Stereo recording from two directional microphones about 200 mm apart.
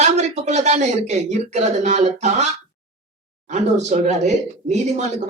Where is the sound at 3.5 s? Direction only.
35° right (ahead or behind).